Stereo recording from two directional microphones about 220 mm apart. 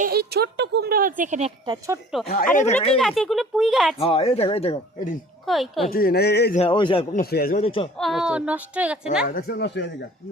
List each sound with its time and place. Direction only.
0.0 s speech: 45° right (ahead or behind); by 2.0 s 20° right (ahead or behind)
2.2 s speech: 40° left (ahead or behind)
3.0 s speech: centre (ahead or behind)
3.9 s speech: 25° left (ahead or behind)
5.5 s speech: centre (ahead or behind)
5.9 s speech: 45° left (ahead or behind)
6.6 s speech: 20° left (ahead or behind)
7.1 s speech: 40° left (ahead or behind)
7.6 s speech: 25° left (ahead or behind)
7.9 s speech: centre (ahead or behind)
9.2 s speech: 45° left (ahead or behind)